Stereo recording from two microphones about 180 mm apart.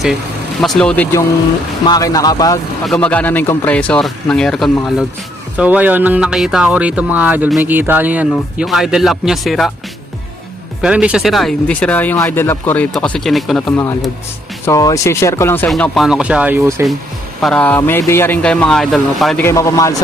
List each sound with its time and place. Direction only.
0.6 s speech: 5° left (ahead or behind)
1.9 s speech: 20° left (ahead or behind)
2.8 s speech: 5° left (ahead or behind)
10.8 s speech: 5° right (ahead or behind)
14.6 s speech: 20° left (ahead or behind)
15.7 s speech: centre (ahead or behind)
17.4 s speech: 5° left (ahead or behind)
19.5 s speech: 15° left (ahead or behind)